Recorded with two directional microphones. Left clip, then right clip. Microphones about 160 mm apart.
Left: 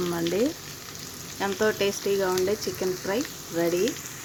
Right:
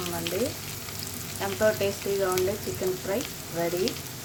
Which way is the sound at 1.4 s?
45° left (ahead or behind).